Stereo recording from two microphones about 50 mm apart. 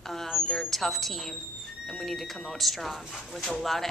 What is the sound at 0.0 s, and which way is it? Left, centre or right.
A woman's voice, centre.